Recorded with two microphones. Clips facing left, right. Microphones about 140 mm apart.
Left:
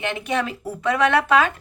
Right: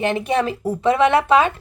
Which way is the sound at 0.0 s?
35° right (ahead or behind).